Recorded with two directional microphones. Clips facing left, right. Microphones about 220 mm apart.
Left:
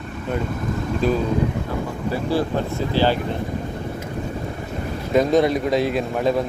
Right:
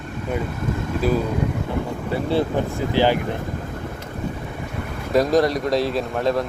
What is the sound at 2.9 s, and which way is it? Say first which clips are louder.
Speech: right 1 dB; 15° right (ahead or behind).